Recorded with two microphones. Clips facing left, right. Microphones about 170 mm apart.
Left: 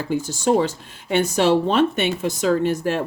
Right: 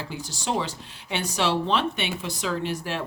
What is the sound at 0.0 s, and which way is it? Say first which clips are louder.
Speech: left 11 dB; 50° left (ahead or behind).